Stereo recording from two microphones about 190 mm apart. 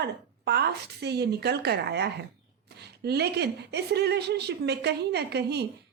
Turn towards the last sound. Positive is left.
turn(degrees=-60)  # may be behind; listen again after turning